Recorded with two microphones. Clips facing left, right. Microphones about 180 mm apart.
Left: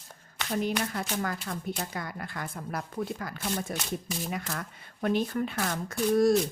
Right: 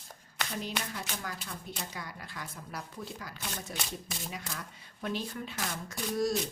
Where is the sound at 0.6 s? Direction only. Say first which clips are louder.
Left 8 dB; 55° left (ahead or behind).